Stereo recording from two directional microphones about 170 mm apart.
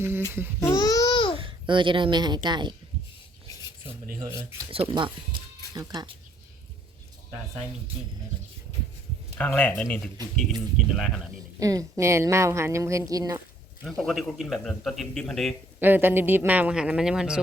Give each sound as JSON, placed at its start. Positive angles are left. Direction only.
{"t": 0.6, "sound": "babbling", "side_deg": 20}
{"t": 1.4, "sound": "speech", "side_deg": -30}
{"t": 4.0, "sound": "speech", "side_deg": -55}
{"t": 4.7, "sound": "speech", "side_deg": -30}
{"t": 9.4, "sound": "a man's voice", "side_deg": 10}
{"t": 11.6, "sound": "a woman's voice", "side_deg": -20}
{"t": 13.8, "sound": "a man's voice", "side_deg": 0}
{"t": 15.8, "sound": "a woman's voice", "side_deg": -10}